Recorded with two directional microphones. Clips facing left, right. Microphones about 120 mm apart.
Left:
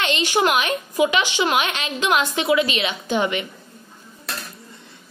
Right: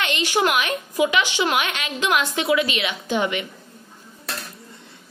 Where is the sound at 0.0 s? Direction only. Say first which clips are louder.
Left 1 dB; 25° left (ahead or behind).